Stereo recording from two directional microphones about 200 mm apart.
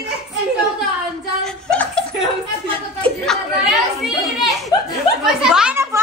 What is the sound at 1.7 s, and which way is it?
Chuckle, 5° left (ahead or behind).